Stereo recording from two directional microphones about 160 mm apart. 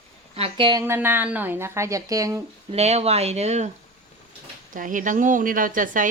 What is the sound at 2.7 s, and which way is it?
Speech, 40° right (ahead or behind).